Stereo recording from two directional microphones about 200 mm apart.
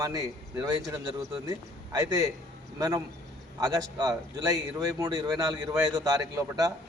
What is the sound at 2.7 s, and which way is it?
A man's voice, 20° right (ahead or behind).